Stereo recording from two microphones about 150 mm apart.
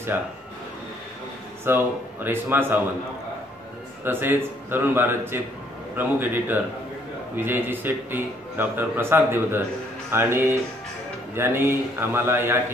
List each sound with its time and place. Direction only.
0.1 s a man's voice: 10° right (ahead or behind)
1.6 s a man's voice: 15° right (ahead or behind)
4.0 s a man's voice: 15° right (ahead or behind)